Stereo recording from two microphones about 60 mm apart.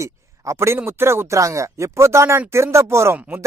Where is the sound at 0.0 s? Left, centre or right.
Right.